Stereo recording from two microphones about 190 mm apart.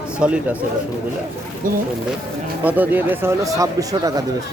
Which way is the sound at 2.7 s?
10° right (ahead or behind).